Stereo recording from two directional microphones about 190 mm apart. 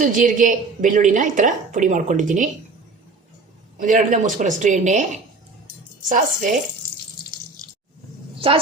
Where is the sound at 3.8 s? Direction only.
40° right (ahead or behind).